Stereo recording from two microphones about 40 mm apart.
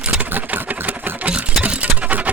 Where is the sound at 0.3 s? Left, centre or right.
Right.